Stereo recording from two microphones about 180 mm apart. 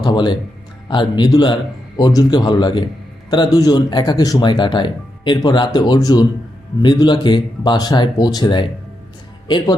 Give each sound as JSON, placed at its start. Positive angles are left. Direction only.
{"t": 0.0, "sound": "speech", "side_deg": 25}